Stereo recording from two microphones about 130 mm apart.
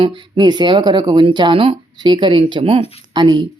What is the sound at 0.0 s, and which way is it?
Speech, 40° right (ahead or behind).